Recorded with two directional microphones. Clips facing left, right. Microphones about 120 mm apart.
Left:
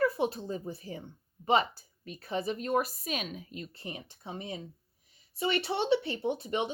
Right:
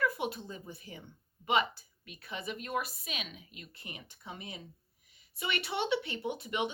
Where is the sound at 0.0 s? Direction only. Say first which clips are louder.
Left 5 dB; 35° left (ahead or behind).